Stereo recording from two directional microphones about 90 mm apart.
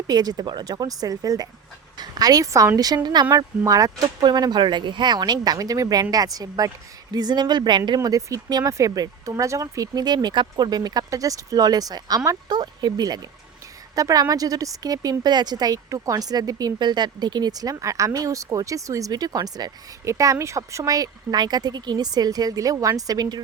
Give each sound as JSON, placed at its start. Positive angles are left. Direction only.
{"t": 0.1, "sound": "speech", "side_deg": -50}
{"t": 3.3, "sound": "speech", "side_deg": -40}
{"t": 12.5, "sound": "speech", "side_deg": -50}
{"t": 20.1, "sound": "speech", "side_deg": -35}